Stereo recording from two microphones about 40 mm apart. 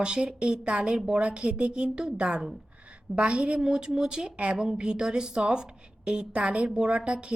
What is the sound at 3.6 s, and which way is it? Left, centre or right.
A woman's voice, centre.